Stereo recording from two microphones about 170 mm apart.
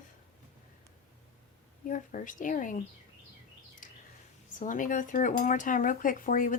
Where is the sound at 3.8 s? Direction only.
55° left (ahead or behind).